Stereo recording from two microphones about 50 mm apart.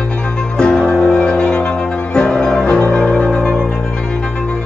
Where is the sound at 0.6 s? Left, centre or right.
Centre.